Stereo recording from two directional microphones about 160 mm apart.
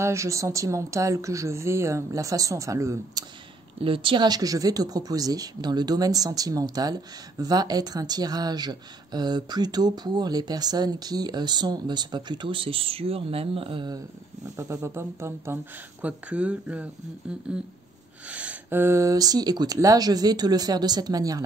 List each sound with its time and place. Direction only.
0.0 s speech: 20° right (ahead or behind)
3.8 s speech: 35° right (ahead or behind)
14.6 s speech: 20° right (ahead or behind)